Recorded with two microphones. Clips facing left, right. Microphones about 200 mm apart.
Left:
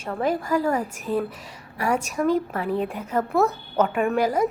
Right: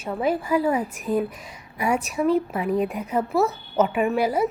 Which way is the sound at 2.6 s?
30° left (ahead or behind).